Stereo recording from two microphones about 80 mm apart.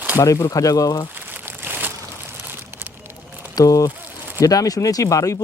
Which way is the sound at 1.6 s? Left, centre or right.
Right.